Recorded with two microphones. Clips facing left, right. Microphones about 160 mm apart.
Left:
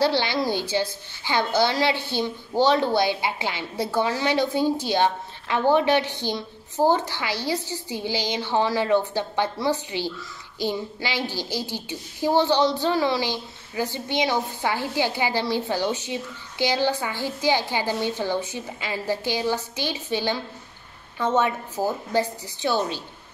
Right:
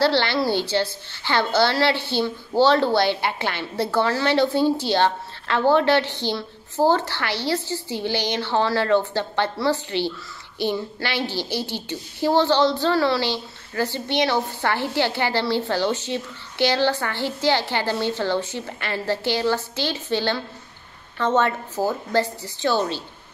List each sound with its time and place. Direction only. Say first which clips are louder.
0.0 s a woman's voice: right 2 dB; 15° left (ahead or behind)